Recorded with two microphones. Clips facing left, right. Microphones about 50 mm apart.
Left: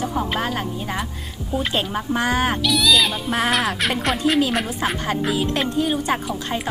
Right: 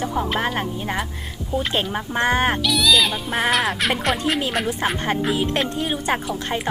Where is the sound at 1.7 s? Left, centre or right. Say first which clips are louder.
Left 1 dB; right.